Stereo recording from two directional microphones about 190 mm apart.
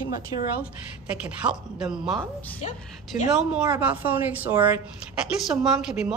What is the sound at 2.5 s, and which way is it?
Speech, 40° left (ahead or behind).